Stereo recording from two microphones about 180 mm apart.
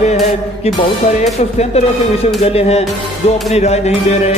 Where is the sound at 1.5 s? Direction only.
35° left (ahead or behind).